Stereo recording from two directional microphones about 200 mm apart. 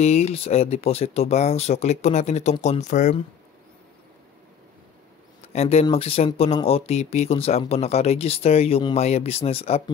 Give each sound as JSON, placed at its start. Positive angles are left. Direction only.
{"t": 0.0, "sound": "speech", "side_deg": 30}
{"t": 5.5, "sound": "speech", "side_deg": 35}